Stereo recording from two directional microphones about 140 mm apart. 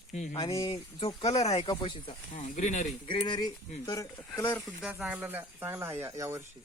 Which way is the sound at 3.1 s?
35° left (ahead or behind).